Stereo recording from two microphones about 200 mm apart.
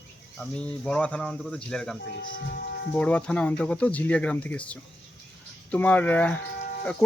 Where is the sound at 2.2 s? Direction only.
45° left (ahead or behind).